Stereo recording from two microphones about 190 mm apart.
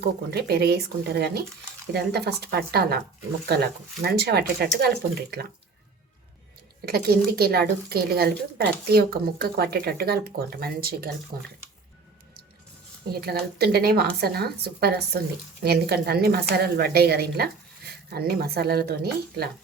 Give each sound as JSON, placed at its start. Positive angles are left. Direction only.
{"t": 0.0, "sound": "a woman's voice", "side_deg": -55}
{"t": 6.8, "sound": "a woman's voice", "side_deg": -55}
{"t": 13.2, "sound": "a woman's voice", "side_deg": -55}